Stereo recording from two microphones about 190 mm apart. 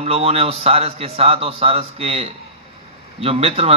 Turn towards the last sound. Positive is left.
turn(degrees=-30)  # may be behind; listen again after turning